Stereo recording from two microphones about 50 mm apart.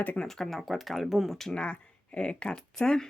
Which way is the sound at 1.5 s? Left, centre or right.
Left.